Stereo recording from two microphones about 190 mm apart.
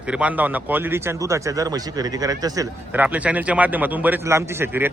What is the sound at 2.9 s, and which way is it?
A man's voice, 10° right (ahead or behind).